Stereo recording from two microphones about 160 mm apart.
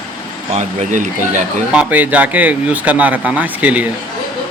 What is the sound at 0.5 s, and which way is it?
Speech, 50° right (ahead or behind).